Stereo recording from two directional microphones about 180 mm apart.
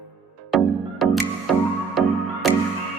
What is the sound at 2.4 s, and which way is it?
Music, centre (ahead or behind).